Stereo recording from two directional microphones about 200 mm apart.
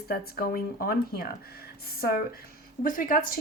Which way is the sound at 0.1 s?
50° left (ahead or behind).